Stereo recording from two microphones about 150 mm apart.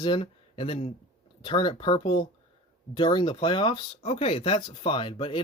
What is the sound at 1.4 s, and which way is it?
Speech, 35° left (ahead or behind).